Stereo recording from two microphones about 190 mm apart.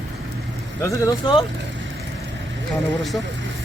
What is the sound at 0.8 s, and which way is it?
Speech, 15° left (ahead or behind).